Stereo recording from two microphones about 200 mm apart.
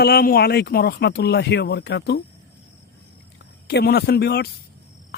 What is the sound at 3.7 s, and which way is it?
Speech, 55° left (ahead or behind).